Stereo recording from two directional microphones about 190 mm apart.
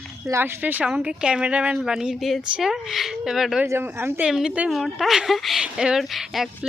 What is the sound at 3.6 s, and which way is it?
Speech, 10° right (ahead or behind).